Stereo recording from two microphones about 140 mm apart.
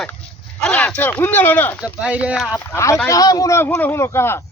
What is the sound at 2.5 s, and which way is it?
A man's voice, 20° left (ahead or behind).